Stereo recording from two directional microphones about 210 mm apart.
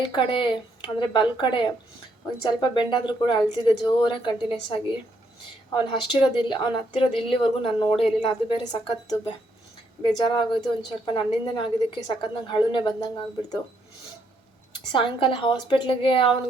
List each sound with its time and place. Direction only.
0.1 s speech: 25° left (ahead or behind)
5.7 s speech: 20° left (ahead or behind)
14.9 s speech: 25° left (ahead or behind)